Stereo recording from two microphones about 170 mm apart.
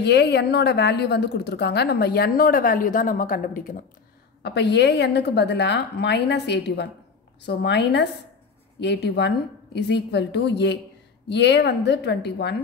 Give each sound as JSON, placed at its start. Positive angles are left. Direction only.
{"t": 0.0, "sound": "a woman's voice", "side_deg": 80}
{"t": 4.4, "sound": "a woman's voice", "side_deg": 80}